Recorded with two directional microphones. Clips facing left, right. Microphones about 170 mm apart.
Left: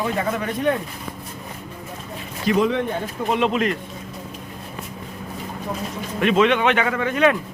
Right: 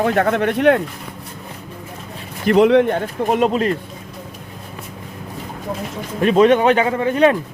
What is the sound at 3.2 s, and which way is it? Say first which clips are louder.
Speech: right 3 dB; 45° right (ahead or behind).